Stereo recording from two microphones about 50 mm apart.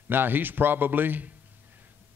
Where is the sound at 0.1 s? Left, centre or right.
Right.